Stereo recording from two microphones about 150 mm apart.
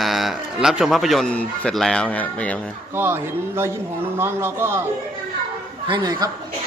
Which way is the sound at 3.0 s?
15° right (ahead or behind).